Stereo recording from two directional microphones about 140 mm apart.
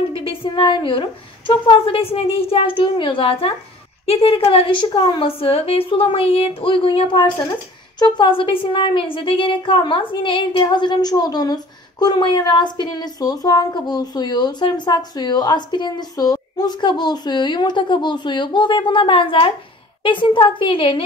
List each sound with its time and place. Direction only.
0.1 s speech: 40° left (ahead or behind)